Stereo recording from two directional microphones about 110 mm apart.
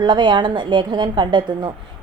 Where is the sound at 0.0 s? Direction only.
45° right (ahead or behind).